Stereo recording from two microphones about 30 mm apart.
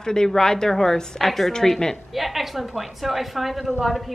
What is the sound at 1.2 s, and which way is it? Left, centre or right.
A woman's voice, centre.